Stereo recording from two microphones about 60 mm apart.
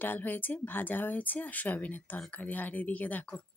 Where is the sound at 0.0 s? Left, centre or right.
Left.